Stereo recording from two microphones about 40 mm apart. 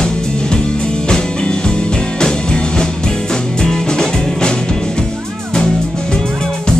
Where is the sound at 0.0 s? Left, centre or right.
Centre.